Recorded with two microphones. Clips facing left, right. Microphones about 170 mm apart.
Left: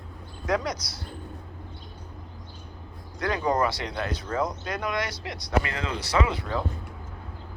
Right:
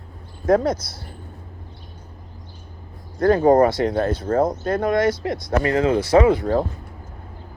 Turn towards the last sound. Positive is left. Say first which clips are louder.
# right 11 dB
turn(degrees=-50)  # may be behind; listen again after turning